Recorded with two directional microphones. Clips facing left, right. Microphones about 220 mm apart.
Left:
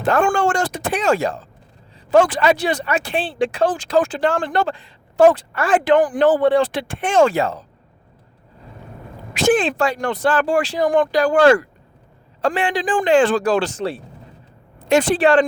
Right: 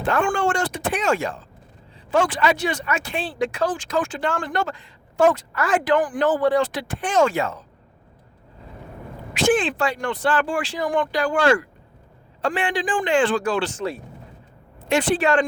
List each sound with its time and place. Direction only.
0.0 s speech: 40° left (ahead or behind)
9.3 s speech: 40° left (ahead or behind)